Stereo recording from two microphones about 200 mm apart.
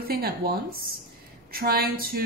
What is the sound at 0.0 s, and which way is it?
Speech, 50° right (ahead or behind).